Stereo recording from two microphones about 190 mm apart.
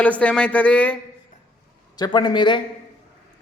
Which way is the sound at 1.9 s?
20° left (ahead or behind).